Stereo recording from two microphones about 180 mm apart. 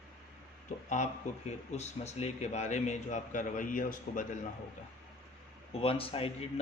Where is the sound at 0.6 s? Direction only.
40° left (ahead or behind).